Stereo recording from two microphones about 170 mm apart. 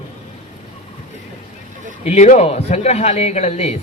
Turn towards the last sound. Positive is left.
turn(degrees=40)  # may be behind; listen again after turning